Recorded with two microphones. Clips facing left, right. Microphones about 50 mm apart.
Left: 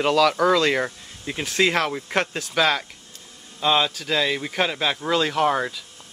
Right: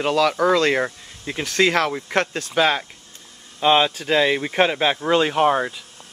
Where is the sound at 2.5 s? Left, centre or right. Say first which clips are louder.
Right 2 dB; centre.